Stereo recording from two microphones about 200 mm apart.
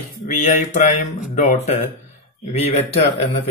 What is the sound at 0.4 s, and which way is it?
A man's voice, 35° left (ahead or behind).